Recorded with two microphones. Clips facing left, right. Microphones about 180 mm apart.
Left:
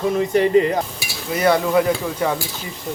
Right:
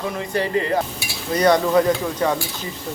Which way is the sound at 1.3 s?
5° left (ahead or behind).